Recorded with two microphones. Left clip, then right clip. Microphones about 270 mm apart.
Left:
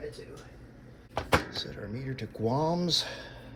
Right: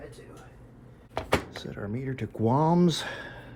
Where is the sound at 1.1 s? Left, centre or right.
Centre.